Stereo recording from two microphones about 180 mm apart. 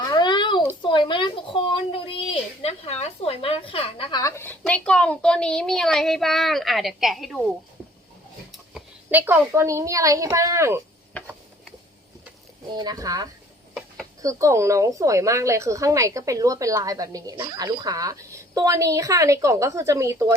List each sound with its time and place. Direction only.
0.1 s a sound: 25° left (ahead or behind)
4.2 s a woman's voice: 15° left (ahead or behind)
8.5 s a woman's voice: 5° right (ahead or behind)
12.7 s speech: 20° right (ahead or behind)
13.7 s a sound: centre (ahead or behind)
14.2 s speech: 20° right (ahead or behind)